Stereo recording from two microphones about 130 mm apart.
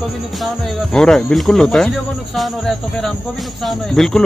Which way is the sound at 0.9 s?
5° left (ahead or behind).